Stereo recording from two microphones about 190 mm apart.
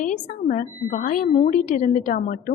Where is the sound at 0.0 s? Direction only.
40° left (ahead or behind).